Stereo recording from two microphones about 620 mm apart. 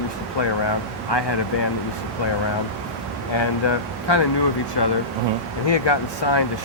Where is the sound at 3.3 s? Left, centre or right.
Left.